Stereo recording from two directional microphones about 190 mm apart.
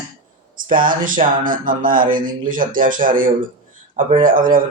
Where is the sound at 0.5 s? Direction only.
45° right (ahead or behind).